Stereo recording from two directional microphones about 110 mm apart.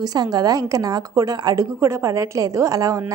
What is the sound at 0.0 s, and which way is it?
A woman's voice, 35° right (ahead or behind).